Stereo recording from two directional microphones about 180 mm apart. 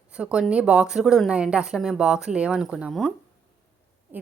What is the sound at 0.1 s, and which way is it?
Speech, 5° right (ahead or behind).